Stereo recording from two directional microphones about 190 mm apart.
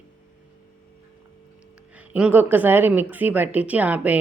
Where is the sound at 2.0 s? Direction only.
5° right (ahead or behind).